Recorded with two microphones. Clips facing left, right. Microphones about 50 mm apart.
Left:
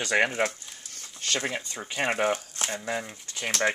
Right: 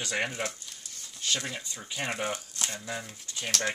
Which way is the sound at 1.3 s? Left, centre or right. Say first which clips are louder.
Left 7 dB; left.